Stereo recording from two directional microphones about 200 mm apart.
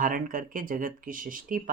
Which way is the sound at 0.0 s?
45° right (ahead or behind).